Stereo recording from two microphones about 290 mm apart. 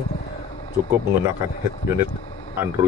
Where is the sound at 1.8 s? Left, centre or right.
Centre.